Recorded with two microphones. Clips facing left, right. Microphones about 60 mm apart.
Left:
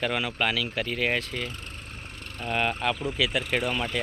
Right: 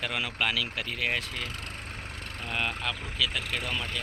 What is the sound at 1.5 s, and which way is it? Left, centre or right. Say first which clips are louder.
Speech: right 1 dB; right.